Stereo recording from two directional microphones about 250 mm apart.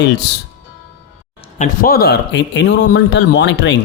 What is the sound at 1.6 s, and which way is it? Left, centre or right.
A man's voice, left.